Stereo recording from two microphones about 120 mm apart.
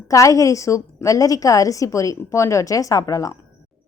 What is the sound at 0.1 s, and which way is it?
A woman's voice, 25° left (ahead or behind).